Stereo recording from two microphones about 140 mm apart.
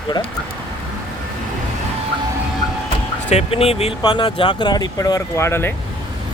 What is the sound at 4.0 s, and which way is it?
Speech, 30° left (ahead or behind).